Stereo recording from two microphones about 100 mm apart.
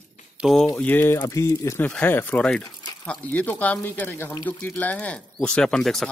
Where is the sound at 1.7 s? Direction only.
15° left (ahead or behind).